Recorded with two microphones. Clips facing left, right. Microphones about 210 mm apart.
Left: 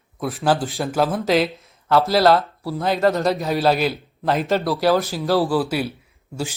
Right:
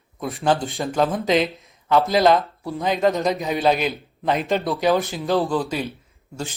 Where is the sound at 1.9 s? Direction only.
15° right (ahead or behind).